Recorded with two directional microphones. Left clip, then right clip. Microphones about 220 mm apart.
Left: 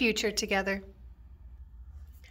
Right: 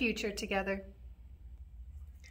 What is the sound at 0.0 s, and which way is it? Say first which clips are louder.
Speech: left 6 dB; 30° left (ahead or behind).